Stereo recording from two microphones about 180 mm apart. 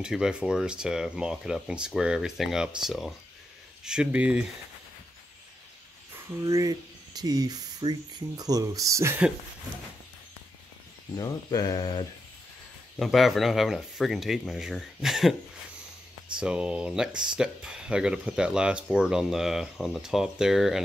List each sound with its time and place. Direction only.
0.0 s speech: 5° right (ahead or behind)
6.4 s speech: 20° right (ahead or behind)
11.1 s speech: 20° left (ahead or behind)
13.0 s speech: centre (ahead or behind)
16.3 s speech: 5° right (ahead or behind)